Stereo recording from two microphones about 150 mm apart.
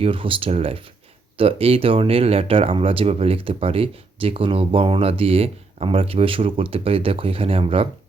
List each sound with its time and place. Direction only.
0.0 s speech: 35° right (ahead or behind)